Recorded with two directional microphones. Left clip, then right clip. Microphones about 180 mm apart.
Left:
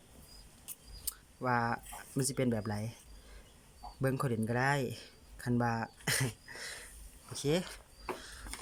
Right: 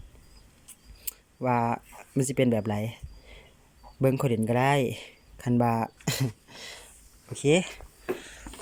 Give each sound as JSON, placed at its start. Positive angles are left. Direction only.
{"t": 1.0, "sound": "speech", "side_deg": -15}
{"t": 4.1, "sound": "speech", "side_deg": -15}